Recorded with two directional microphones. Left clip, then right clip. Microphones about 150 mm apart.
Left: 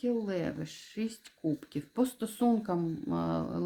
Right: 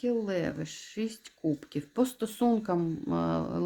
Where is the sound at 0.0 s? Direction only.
15° right (ahead or behind).